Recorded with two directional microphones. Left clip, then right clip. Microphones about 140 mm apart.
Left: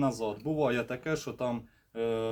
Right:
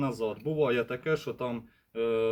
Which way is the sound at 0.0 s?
25° left (ahead or behind).